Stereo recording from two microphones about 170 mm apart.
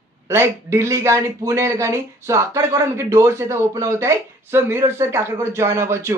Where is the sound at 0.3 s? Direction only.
15° right (ahead or behind).